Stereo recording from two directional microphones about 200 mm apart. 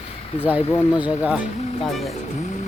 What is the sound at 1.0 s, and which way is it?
Speech, 5° right (ahead or behind).